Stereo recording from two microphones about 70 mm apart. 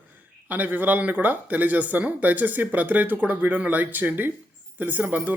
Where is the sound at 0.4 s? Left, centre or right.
Right.